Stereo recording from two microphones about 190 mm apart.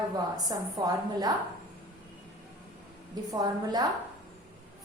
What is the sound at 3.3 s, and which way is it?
Speech, 20° right (ahead or behind).